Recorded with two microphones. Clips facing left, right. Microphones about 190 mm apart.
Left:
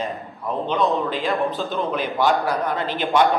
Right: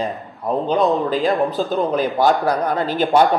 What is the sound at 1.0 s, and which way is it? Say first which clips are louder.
A man's voice: right 5 dB; 40° right (ahead or behind).